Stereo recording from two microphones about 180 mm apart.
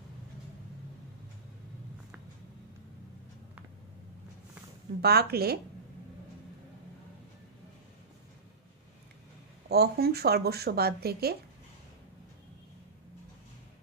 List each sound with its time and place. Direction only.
5.0 s speech: 60° right (ahead or behind)
9.7 s speech: 60° right (ahead or behind)